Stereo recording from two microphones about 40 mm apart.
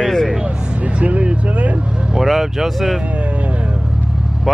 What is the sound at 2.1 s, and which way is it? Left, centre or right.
Speech, centre.